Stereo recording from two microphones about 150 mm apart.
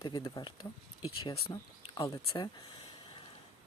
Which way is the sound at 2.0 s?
30° left (ahead or behind).